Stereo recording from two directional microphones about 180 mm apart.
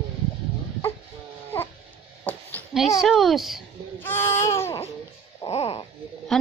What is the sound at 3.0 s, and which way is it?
Speech, centre (ahead or behind).